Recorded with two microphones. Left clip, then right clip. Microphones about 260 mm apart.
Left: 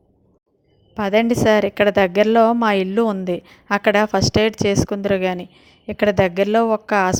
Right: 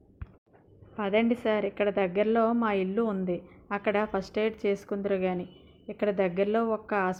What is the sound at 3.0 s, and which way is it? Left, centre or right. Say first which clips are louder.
Speech: left 10 dB; left.